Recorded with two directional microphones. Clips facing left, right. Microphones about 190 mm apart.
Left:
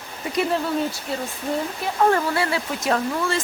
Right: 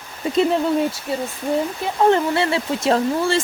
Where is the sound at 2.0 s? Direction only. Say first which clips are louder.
Right 4 dB; 25° right (ahead or behind).